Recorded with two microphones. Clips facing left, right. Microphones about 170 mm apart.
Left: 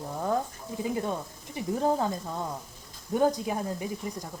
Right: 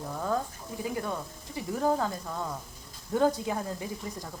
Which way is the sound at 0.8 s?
20° left (ahead or behind).